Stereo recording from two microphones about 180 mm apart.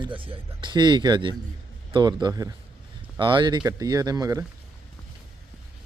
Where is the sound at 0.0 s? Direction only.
30° right (ahead or behind).